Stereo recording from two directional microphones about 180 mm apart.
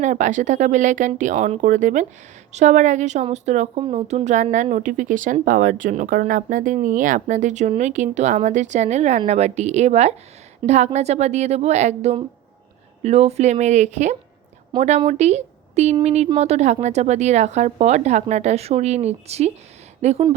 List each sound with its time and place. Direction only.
0.0 s speech: 40° right (ahead or behind)